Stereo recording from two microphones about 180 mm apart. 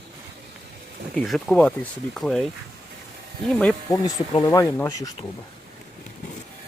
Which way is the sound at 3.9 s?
20° left (ahead or behind).